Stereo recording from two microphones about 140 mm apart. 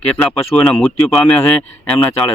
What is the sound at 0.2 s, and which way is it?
Speech, 10° left (ahead or behind).